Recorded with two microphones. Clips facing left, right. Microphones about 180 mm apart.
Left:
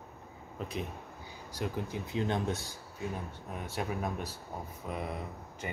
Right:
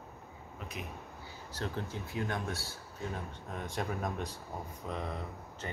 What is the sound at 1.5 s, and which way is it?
Speech, 10° left (ahead or behind).